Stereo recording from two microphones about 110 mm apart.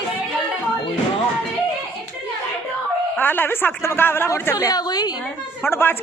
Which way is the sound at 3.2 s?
20° left (ahead or behind).